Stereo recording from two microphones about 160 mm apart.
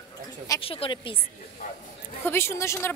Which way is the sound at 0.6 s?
35° left (ahead or behind).